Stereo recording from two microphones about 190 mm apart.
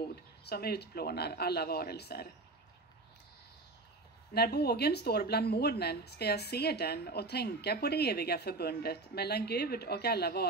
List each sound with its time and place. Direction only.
0.1 s speech: 55° left (ahead or behind)
4.3 s speech: 60° left (ahead or behind)